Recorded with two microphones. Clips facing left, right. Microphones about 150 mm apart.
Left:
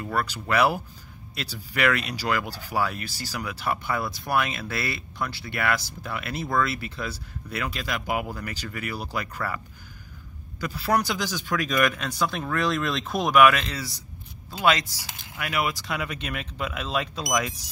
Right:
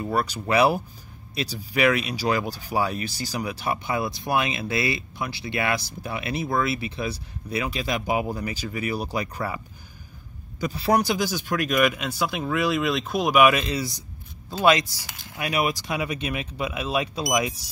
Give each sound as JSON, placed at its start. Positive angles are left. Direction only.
{"t": 0.0, "sound": "speech", "side_deg": -15}
{"t": 10.6, "sound": "speech", "side_deg": -15}
{"t": 13.4, "sound": "speech", "side_deg": -15}